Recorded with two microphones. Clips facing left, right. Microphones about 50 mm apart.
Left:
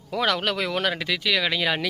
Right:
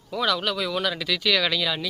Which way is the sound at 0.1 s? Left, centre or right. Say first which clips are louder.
Left 1 dB; left.